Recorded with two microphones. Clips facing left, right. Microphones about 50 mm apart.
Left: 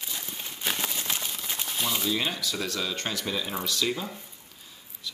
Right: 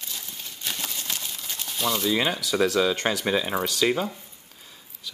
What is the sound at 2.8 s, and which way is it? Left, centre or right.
Speech, right.